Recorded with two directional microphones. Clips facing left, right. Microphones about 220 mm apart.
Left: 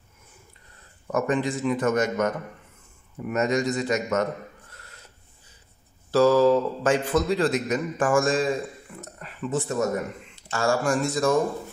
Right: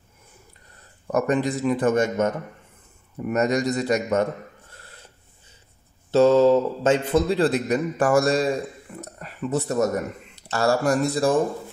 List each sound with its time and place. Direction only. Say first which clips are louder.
1.1 s a man's voice: right 2 dB; 40° right (ahead or behind)
3.3 s a man's voice: right 2 dB; 35° right (ahead or behind)
4.7 s filing: right 2 dB; 30° right (ahead or behind)
6.1 s a man's voice: right 2 dB; 25° right (ahead or behind)